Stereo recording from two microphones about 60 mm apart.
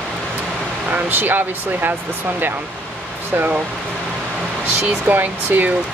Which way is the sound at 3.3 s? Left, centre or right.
Right.